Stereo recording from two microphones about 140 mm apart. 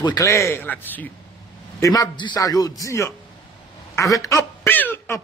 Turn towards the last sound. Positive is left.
turn(degrees=15)  # may be behind; listen again after turning